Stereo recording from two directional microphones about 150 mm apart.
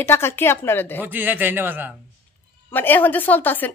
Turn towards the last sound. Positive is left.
turn(degrees=10)  # may be behind; listen again after turning